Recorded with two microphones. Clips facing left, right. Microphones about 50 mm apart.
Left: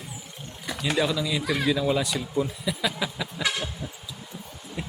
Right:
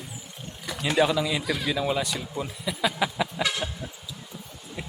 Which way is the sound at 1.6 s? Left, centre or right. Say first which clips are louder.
Left 3 dB; centre.